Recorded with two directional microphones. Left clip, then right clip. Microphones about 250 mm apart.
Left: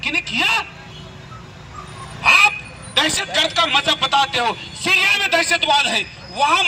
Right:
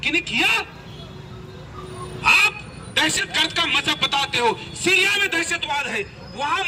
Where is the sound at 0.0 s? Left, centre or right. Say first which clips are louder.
Left 1 dB; centre.